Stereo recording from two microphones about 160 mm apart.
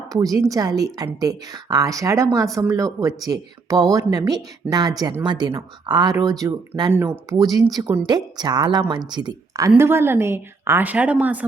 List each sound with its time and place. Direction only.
0.1 s a woman's voice: 20° right (ahead or behind)